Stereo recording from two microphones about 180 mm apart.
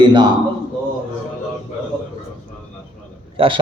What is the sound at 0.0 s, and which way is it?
Speech, 25° right (ahead or behind).